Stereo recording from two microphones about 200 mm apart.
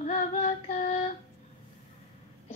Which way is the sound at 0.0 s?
35° left (ahead or behind).